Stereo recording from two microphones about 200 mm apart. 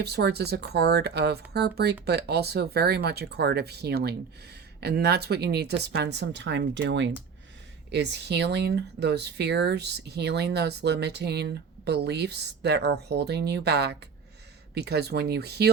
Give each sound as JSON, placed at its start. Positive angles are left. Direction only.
{"t": 0.0, "sound": "speech", "side_deg": -55}